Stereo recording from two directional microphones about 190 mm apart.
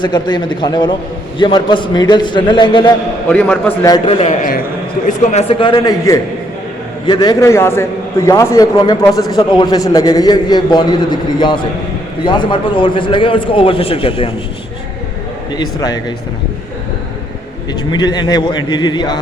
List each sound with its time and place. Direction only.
0.0 s a man's voice: 25° left (ahead or behind)
3.2 s a man's voice: 10° left (ahead or behind)
3.8 s a man's voice: 20° left (ahead or behind)
4.2 s a man's voice: 45° left (ahead or behind)
15.5 s a man's voice: 20° left (ahead or behind)
17.9 s a man's voice: 20° left (ahead or behind)